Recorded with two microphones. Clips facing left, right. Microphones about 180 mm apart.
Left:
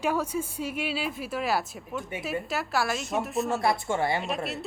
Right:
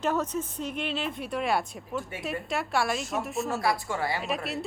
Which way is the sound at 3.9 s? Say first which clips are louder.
Left 4 dB; 25° left (ahead or behind).